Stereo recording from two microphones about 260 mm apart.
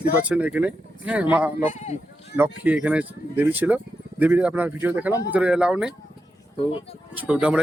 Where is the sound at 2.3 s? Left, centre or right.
Centre.